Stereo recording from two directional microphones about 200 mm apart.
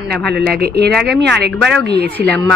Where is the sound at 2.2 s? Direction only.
5° left (ahead or behind).